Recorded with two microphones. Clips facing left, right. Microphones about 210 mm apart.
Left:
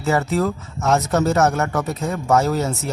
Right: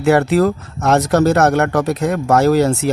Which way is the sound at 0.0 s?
75° right (ahead or behind).